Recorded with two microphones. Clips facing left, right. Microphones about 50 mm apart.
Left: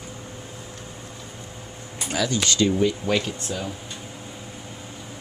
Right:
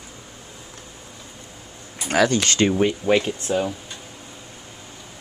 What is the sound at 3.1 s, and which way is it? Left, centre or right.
Speech, right.